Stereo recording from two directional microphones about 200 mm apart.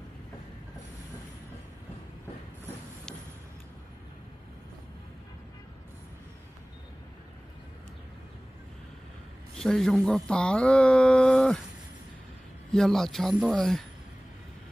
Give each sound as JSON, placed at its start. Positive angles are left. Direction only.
{"t": 9.6, "sound": "speech", "side_deg": 5}
{"t": 12.7, "sound": "speech", "side_deg": 0}